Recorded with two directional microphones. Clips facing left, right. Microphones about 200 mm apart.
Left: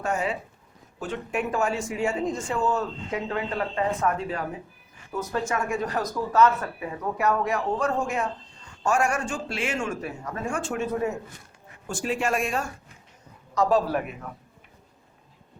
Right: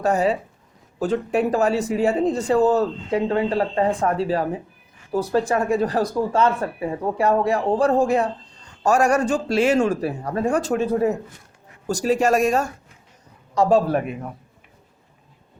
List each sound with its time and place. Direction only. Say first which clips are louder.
0.0 s speech: right 8 dB; 35° right (ahead or behind)
13.5 s a man's voice: right 5 dB; 30° right (ahead or behind)